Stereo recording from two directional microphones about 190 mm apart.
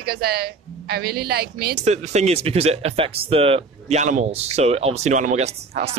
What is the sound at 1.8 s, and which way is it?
Speech, 35° right (ahead or behind).